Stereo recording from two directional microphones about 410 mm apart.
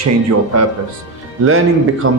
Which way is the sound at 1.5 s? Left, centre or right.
Right.